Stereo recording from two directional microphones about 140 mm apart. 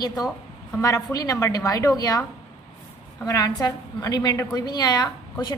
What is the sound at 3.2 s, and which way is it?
A woman's voice, 25° left (ahead or behind).